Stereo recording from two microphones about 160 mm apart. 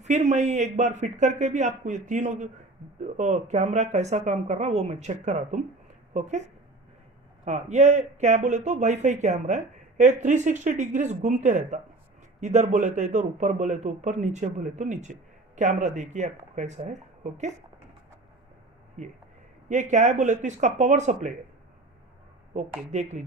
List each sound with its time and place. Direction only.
0.0 s speech: 45° right (ahead or behind)
19.7 s speech: 50° right (ahead or behind)
22.8 s speech: 50° right (ahead or behind)